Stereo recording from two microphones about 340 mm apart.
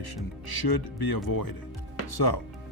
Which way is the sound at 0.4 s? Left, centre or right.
Left.